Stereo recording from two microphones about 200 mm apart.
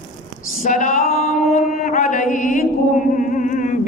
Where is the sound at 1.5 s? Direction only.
45° left (ahead or behind).